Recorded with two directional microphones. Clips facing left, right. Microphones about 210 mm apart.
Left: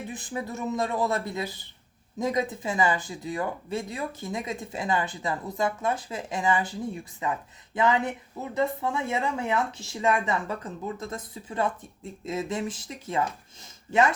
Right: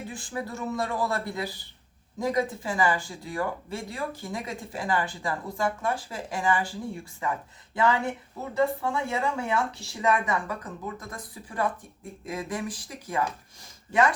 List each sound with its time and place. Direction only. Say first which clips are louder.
0.1 s speech: left 1 dB; 20° left (ahead or behind)